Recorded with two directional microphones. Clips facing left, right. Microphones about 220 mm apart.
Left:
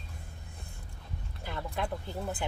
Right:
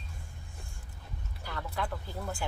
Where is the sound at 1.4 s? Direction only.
20° left (ahead or behind).